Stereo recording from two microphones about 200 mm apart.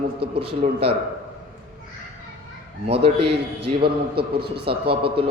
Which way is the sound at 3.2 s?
55° right (ahead or behind).